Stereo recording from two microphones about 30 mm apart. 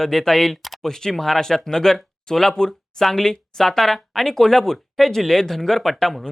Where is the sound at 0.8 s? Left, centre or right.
Centre.